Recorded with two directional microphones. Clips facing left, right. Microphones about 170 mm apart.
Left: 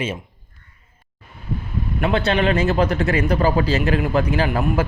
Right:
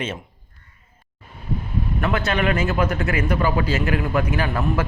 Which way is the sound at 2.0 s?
25° left (ahead or behind).